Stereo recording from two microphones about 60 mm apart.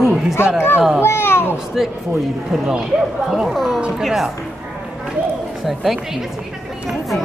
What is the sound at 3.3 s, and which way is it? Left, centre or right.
Speech, centre.